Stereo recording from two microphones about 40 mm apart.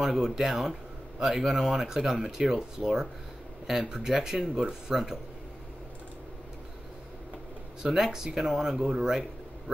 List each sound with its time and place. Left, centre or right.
0.0 s speech: centre
7.8 s speech: centre